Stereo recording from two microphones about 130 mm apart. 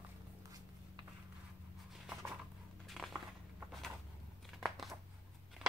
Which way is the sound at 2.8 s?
Centre (ahead or behind).